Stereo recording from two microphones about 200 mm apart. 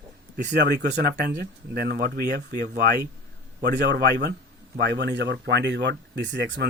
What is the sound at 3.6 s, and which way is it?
Speech, 55° right (ahead or behind).